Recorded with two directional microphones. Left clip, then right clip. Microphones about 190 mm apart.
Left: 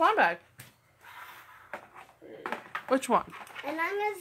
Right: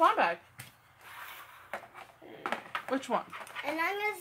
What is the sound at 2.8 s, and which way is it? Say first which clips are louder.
Speech: left 7 dB; 55° left (ahead or behind).